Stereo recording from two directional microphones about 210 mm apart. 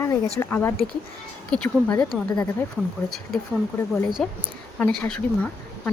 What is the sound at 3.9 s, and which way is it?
Speech, centre (ahead or behind).